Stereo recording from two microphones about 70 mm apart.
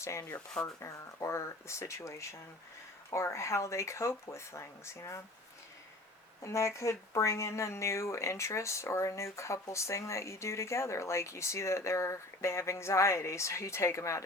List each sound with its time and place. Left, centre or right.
0.0 s speech: left
6.4 s speech: left